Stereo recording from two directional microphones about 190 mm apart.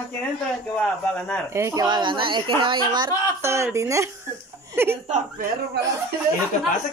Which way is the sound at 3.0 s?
15° right (ahead or behind).